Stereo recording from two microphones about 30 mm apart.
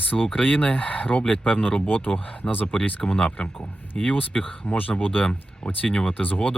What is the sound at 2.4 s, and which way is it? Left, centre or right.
Speech, left.